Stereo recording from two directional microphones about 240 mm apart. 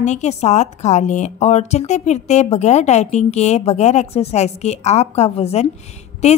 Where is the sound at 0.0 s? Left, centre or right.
Left.